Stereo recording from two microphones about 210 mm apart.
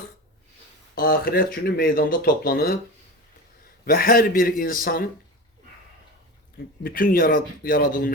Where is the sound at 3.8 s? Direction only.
45° left (ahead or behind).